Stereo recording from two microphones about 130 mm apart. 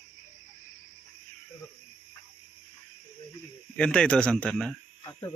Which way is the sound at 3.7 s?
10° left (ahead or behind).